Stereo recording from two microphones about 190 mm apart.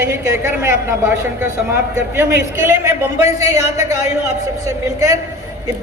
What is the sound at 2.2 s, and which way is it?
A woman's voice, 15° right (ahead or behind).